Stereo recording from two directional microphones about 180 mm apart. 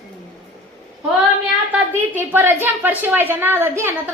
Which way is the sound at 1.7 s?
10° right (ahead or behind).